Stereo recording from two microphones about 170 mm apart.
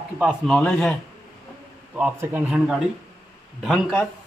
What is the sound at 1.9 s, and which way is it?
Speech, 10° right (ahead or behind).